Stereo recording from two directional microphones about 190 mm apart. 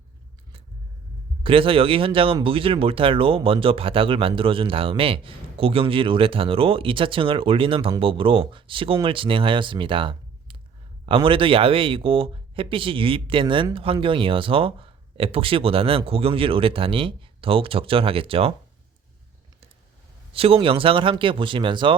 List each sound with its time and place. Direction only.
1.5 s speech: 30° right (ahead or behind)
20.3 s speech: 30° right (ahead or behind)